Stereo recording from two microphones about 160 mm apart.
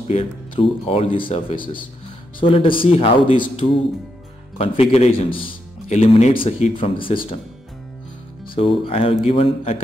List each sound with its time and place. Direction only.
0.1 s a man's voice: 40° left (ahead or behind)
8.5 s a man's voice: 35° left (ahead or behind)